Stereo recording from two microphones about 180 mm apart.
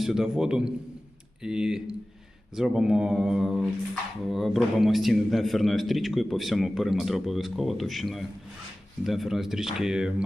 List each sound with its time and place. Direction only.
0.0 s a man's voice: centre (ahead or behind)